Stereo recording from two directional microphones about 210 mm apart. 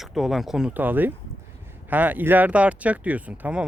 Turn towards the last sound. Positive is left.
turn(degrees=-5)  # may be behind; listen again after turning